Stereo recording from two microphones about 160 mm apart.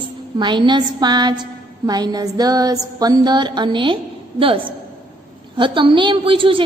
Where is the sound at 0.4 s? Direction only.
30° right (ahead or behind).